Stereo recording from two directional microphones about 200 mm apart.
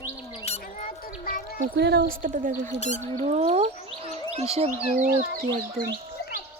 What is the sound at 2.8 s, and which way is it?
Speech, 35° left (ahead or behind).